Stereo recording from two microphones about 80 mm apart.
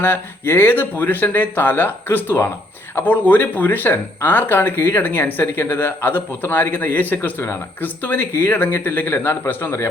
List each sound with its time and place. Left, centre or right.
0.0 s speech: left